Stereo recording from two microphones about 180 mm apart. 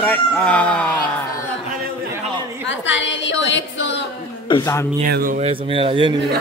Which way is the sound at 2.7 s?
90° left.